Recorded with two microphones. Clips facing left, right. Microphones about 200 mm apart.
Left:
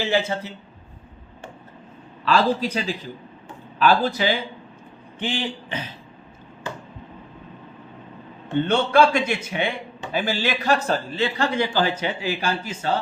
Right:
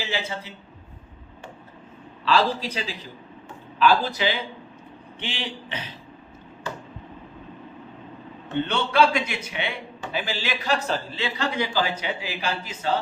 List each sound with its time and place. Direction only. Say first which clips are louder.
0.0 s a man's voice: left 8 dB; 55° left (ahead or behind)
2.2 s a man's voice: left 2 dB; 50° left (ahead or behind)
8.6 s a man's voice: left 4 dB; 50° left (ahead or behind)